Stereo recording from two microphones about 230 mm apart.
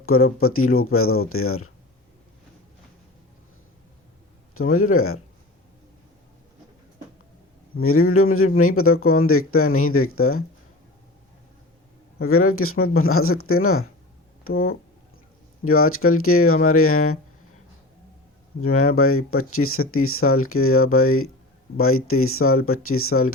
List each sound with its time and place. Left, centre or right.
0.0 s speech: left
4.5 s speech: left
7.8 s speech: left
12.2 s speech: left
15.6 s speech: left
18.6 s speech: left